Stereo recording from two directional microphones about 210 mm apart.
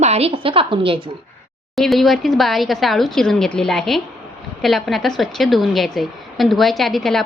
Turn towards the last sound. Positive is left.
turn(degrees=0)  # may be behind; listen again after turning